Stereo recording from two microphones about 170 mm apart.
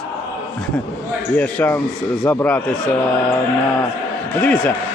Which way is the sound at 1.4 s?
10° left (ahead or behind).